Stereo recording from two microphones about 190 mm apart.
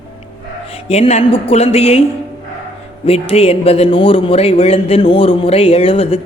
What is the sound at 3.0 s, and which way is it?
A man's voice, 30° left (ahead or behind).